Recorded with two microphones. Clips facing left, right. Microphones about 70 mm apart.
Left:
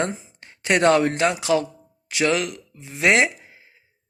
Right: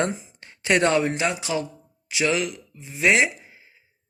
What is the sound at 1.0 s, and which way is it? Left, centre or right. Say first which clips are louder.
Speech: left 3 dB; left.